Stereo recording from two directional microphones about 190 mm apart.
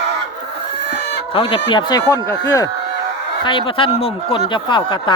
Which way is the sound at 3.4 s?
25° left (ahead or behind).